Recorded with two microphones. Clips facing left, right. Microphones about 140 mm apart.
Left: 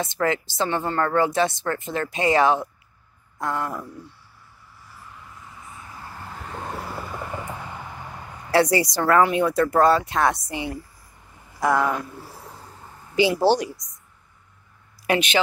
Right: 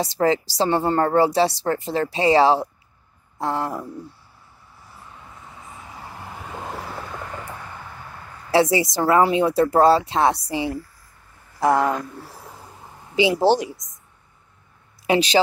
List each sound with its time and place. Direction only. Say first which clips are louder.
0.0 s a woman's voice: right 4 dB; 35° right (ahead or behind)
5.9 s vehicle: right 1 dB; 20° right (ahead or behind); by 8.4 s 15° left (ahead or behind)
8.5 s speech: right 1 dB; 25° right (ahead or behind)
11.6 s speech: right 3 dB; 25° right (ahead or behind)
12.1 s a sound: right 1 dB; centre (ahead or behind)
12.8 s speech: right 1 dB; 20° right (ahead or behind)
15.0 s a woman's voice: right 4 dB; 35° right (ahead or behind)